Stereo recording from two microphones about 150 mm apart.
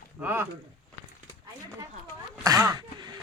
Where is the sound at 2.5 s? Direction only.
20° right (ahead or behind).